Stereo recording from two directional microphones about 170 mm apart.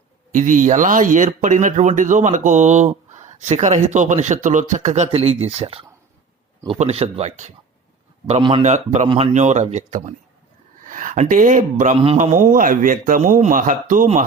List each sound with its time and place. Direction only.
0.3 s speech: 45° right (ahead or behind)
8.3 s a man's voice: 30° right (ahead or behind)
8.6 s speech: 45° right (ahead or behind)
9.0 s speech: 30° right (ahead or behind)
9.3 s speech: 45° right (ahead or behind)